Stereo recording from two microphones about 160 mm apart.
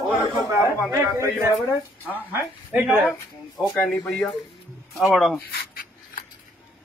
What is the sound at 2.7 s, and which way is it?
Speech, 5° right (ahead or behind).